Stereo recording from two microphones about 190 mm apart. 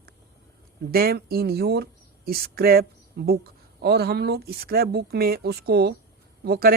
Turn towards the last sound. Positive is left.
turn(degrees=-55)  # may be behind; listen again after turning